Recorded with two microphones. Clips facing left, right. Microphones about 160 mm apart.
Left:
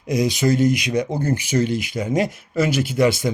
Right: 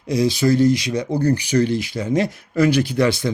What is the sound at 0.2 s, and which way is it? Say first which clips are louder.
Speech: right 2 dB; 20° left (ahead or behind).